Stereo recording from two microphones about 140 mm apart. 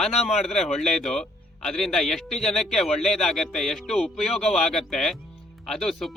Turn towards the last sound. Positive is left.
turn(degrees=0)  # may be behind; listen again after turning